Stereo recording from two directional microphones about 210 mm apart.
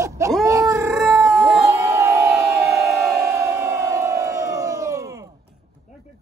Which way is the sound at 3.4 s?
15° right (ahead or behind).